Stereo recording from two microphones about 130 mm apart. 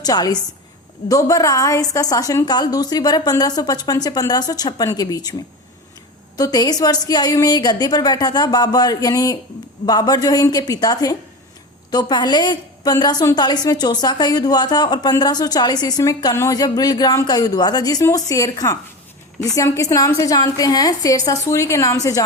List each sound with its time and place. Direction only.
0.0 s a woman's voice: 30° left (ahead or behind)
6.3 s a woman's voice: 30° left (ahead or behind)